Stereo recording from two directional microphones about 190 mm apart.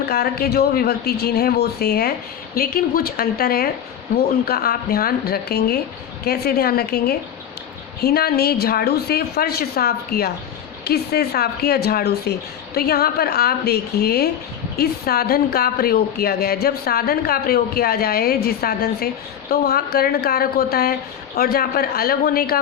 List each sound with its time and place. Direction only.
0.0 s a woman's voice: 55° left (ahead or behind)